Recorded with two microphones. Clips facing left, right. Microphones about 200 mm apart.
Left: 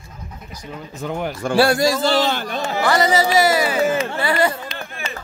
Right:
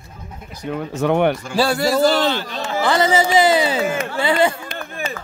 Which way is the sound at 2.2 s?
50° left (ahead or behind).